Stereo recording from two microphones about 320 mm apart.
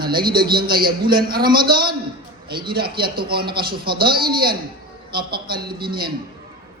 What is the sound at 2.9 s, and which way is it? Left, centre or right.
A man's voice, right.